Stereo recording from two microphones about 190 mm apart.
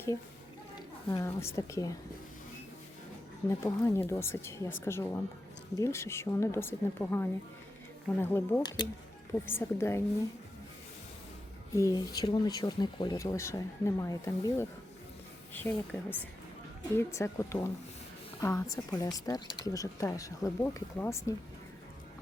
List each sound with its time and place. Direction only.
0.8 s a woman's voice: 20° left (ahead or behind)
3.6 s speech: 15° left (ahead or behind)
11.8 s speech: 20° left (ahead or behind)